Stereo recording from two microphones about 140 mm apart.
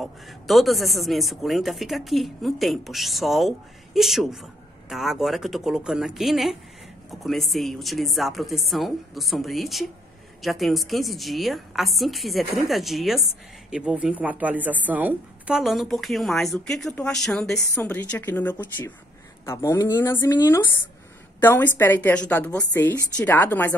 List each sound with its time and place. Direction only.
0.0 s a woman's voice: centre (ahead or behind)